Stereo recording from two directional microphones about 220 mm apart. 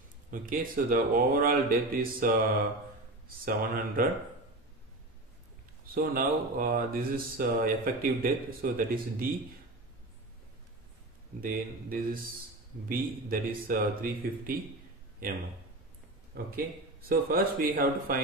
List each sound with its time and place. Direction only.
0.3 s speech: 40° right (ahead or behind)
3.4 s speech: 40° right (ahead or behind)
5.9 s speech: 40° right (ahead or behind)
11.4 s a man's voice: 40° right (ahead or behind)
17.1 s speech: 40° right (ahead or behind)